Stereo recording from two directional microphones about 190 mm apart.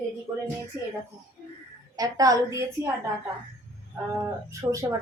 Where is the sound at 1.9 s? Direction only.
20° right (ahead or behind).